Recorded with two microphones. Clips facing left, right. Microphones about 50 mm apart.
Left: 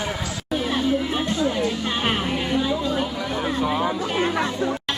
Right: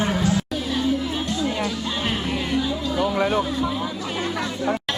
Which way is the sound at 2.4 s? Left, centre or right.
Left.